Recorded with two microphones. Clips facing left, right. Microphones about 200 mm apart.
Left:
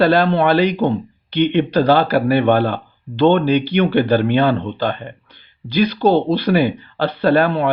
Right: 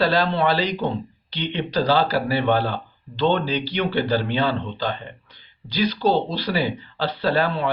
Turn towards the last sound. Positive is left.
turn(degrees=55)  # may be behind; listen again after turning